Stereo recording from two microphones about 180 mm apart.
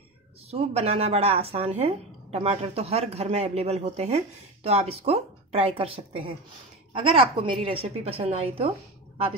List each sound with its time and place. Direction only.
0.5 s speech: 35° right (ahead or behind)